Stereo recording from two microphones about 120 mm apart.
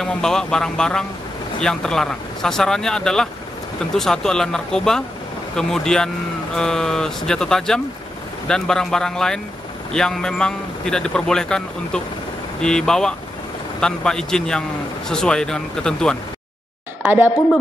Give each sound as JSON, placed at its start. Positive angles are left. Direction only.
{"t": 0.0, "sound": "a man's voice", "side_deg": 5}
{"t": 17.0, "sound": "speech", "side_deg": -15}